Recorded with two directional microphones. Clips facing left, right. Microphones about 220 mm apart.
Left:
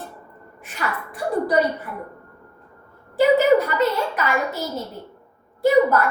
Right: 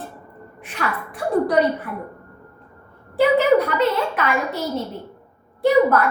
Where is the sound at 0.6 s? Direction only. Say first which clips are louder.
Right 2 dB; centre (ahead or behind).